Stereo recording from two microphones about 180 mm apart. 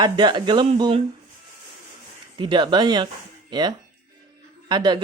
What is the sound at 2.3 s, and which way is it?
Speech, 25° right (ahead or behind).